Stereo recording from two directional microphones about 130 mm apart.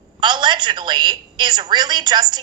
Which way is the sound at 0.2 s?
35° right (ahead or behind).